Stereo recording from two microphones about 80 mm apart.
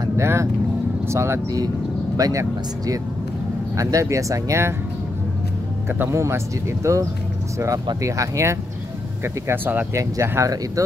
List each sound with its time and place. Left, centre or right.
0.0 s vehicle: right
1.0 s speech: right
2.1 s speech: right
3.7 s speech: right
5.9 s speech: right
9.2 s speech: right
9.9 s speech: right